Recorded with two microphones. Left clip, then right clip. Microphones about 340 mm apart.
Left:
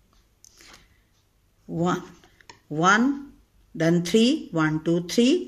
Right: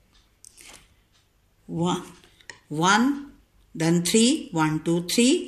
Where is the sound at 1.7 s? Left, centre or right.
Left.